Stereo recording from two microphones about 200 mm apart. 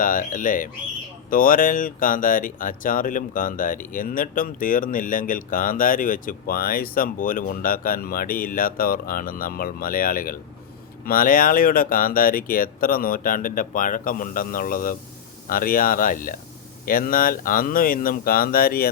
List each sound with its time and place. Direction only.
0.0 s speech: 40° left (ahead or behind)